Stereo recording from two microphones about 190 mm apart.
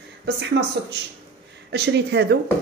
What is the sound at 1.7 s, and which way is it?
Speech, 60° right (ahead or behind).